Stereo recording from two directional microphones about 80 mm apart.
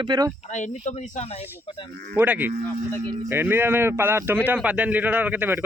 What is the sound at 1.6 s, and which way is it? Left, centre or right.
Speech, left.